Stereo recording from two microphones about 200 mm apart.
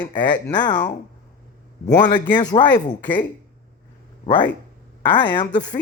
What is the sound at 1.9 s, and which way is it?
Speech, 20° left (ahead or behind).